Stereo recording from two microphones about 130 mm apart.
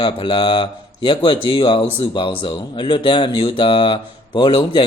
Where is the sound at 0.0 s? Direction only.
40° left (ahead or behind).